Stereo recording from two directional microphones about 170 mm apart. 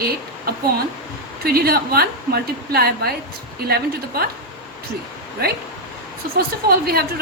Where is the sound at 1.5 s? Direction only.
65° right (ahead or behind).